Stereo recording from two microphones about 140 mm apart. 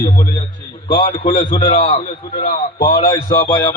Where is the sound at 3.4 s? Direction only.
30° left (ahead or behind).